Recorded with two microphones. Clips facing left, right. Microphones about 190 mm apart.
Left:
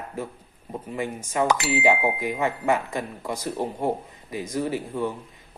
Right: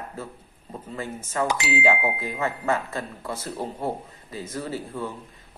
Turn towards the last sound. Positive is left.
turn(degrees=15)  # may be behind; listen again after turning